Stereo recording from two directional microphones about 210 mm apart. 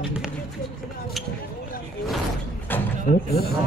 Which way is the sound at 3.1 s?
45° left (ahead or behind).